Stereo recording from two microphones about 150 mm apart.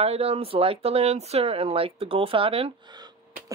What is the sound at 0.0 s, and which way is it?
Speech, 40° right (ahead or behind).